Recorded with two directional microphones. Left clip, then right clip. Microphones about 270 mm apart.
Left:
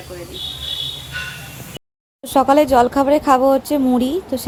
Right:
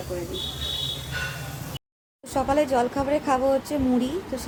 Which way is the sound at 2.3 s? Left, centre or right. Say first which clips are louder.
Left 10 dB; left.